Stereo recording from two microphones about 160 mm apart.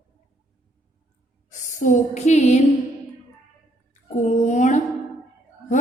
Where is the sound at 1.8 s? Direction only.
50° left (ahead or behind).